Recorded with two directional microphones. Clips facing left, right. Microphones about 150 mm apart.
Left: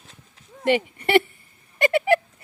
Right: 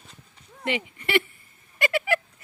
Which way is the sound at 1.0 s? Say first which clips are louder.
Left 6 dB; 35° left (ahead or behind).